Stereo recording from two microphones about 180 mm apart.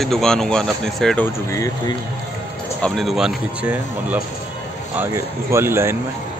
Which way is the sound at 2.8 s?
Centre (ahead or behind).